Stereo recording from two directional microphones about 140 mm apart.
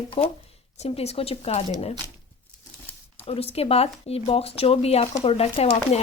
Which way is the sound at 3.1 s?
45° left (ahead or behind).